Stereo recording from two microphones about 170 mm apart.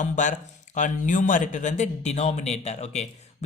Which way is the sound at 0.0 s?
45° left (ahead or behind).